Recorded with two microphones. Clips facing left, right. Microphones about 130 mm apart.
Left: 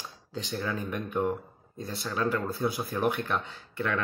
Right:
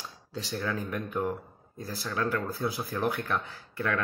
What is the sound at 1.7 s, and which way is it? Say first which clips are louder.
Speech: left 1 dB; 20° left (ahead or behind).